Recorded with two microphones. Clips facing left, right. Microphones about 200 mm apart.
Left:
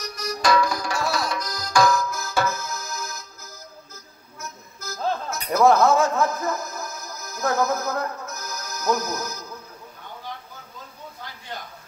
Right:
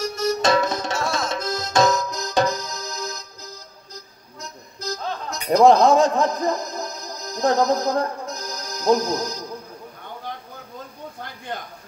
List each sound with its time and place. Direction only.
0.0 s music: 25° right (ahead or behind)
5.5 s speech: 15° right (ahead or behind)
8.3 s music: 15° right (ahead or behind)